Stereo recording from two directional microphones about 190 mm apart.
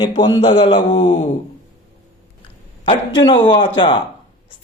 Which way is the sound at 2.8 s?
25° left (ahead or behind).